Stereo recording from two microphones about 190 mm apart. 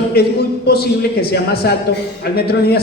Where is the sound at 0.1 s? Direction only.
55° left (ahead or behind).